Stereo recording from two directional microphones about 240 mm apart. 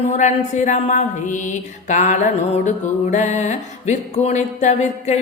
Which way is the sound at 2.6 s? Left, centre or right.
Left.